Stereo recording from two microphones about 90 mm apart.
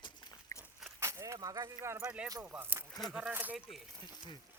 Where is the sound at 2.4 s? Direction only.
20° right (ahead or behind).